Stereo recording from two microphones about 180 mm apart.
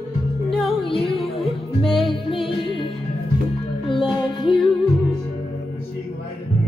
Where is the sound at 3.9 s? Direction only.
25° left (ahead or behind).